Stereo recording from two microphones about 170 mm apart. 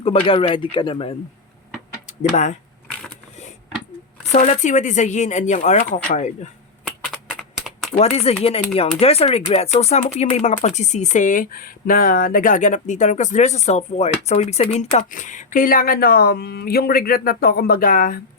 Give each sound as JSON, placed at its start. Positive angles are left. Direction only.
{"t": 0.0, "sound": "speech", "side_deg": 35}
{"t": 2.0, "sound": "speech", "side_deg": 45}
{"t": 4.3, "sound": "speech", "side_deg": 45}
{"t": 6.8, "sound": "typing", "side_deg": -5}
{"t": 7.9, "sound": "speech", "side_deg": 40}